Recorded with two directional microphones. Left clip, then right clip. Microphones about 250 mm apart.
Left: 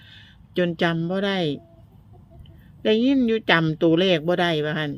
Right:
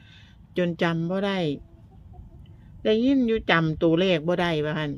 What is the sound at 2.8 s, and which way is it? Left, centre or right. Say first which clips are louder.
A woman's voice: left 2 dB; centre.